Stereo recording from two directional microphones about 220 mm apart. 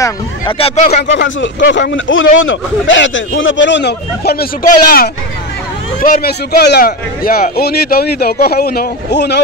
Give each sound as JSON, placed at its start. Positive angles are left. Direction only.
{"t": 0.0, "sound": "speech", "side_deg": 25}
{"t": 1.0, "sound": "a man's voice", "side_deg": 55}